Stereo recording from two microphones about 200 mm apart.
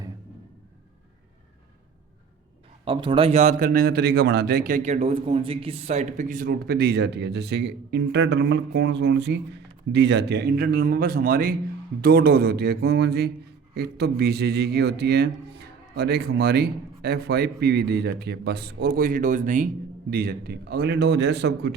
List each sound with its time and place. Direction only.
2.8 s a man's voice: 25° right (ahead or behind); by 21.7 s 60° right (ahead or behind)